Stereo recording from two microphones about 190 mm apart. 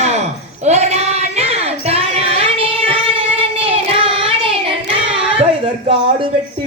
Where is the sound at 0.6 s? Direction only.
35° right (ahead or behind).